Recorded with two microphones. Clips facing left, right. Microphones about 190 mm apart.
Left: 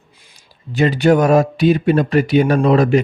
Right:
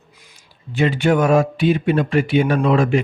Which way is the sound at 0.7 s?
40° left (ahead or behind).